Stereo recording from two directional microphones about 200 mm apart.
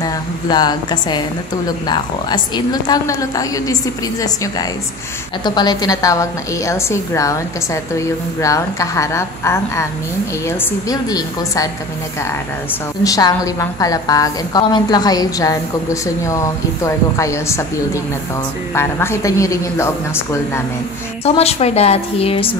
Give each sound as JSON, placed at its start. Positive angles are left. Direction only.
{"t": 0.0, "sound": "a woman's voice", "side_deg": 20}
{"t": 5.4, "sound": "a woman's voice", "side_deg": 20}
{"t": 10.9, "sound": "a woman's voice", "side_deg": 20}
{"t": 13.0, "sound": "a woman's voice", "side_deg": 15}
{"t": 18.8, "sound": "a woman's voice", "side_deg": 15}
{"t": 21.2, "sound": "a woman's voice", "side_deg": 30}